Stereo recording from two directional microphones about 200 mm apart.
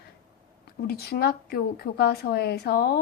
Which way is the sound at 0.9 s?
50° left (ahead or behind).